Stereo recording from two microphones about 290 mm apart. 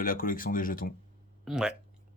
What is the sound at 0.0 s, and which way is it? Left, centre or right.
Speech, left.